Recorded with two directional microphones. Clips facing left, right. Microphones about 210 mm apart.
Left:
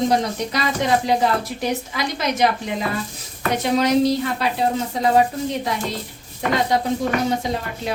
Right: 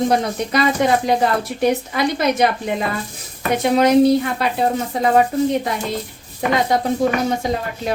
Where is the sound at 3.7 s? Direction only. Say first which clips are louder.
Right 5 dB; 55° right (ahead or behind).